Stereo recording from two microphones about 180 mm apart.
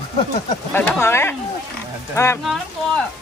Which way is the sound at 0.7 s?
10° left (ahead or behind).